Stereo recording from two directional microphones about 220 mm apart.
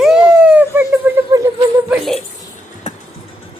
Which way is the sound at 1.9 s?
Centre (ahead or behind).